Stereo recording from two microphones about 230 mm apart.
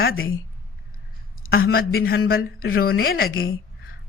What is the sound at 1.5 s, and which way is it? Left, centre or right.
A woman's voice, left.